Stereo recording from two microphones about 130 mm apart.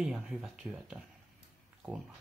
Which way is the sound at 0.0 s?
5° right (ahead or behind).